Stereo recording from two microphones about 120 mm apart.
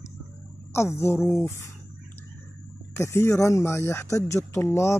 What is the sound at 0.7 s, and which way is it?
Speech, 20° left (ahead or behind).